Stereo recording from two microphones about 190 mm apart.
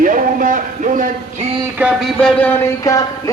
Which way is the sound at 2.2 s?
5° left (ahead or behind).